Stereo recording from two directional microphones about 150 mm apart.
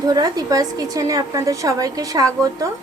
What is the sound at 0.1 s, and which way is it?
A woman's voice, 25° right (ahead or behind).